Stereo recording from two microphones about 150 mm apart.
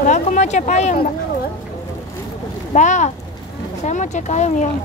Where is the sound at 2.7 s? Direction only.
55° left (ahead or behind).